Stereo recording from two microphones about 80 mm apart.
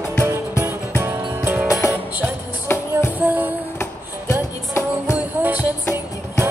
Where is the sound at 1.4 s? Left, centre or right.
Right.